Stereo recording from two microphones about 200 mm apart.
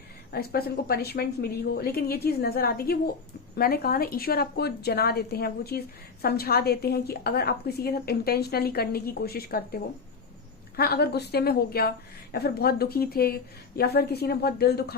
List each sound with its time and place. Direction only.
0.3 s a woman's voice: 50° left (ahead or behind)